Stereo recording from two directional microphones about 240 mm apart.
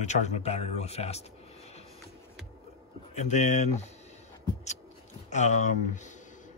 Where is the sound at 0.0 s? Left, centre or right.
Left.